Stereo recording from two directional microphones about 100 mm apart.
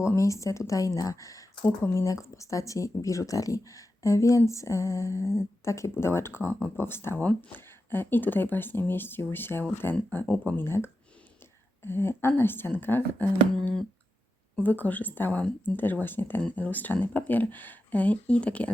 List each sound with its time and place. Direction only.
0.0 s speech: 30° left (ahead or behind); by 10.5 s 15° left (ahead or behind)
10.6 s speech: 25° left (ahead or behind)
14.5 s speech: 15° left (ahead or behind)